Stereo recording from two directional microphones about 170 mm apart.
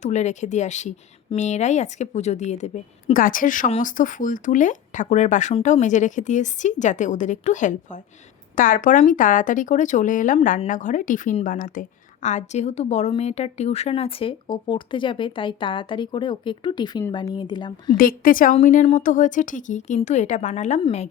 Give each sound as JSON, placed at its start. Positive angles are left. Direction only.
{"t": 0.0, "sound": "a woman's voice", "side_deg": 45}
{"t": 17.9, "sound": "a woman's voice", "side_deg": 60}